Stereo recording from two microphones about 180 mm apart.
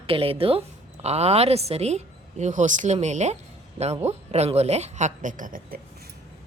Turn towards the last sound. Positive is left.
turn(degrees=-50)  # may be behind; listen again after turning